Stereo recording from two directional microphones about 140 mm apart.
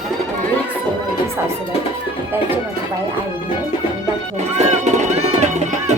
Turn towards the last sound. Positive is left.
turn(degrees=-55)  # may be behind; listen again after turning